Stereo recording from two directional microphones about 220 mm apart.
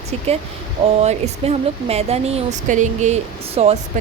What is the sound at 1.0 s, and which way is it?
Speech, 30° right (ahead or behind).